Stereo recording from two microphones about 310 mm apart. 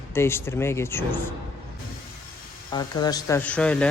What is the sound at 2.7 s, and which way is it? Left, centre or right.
Speech, centre.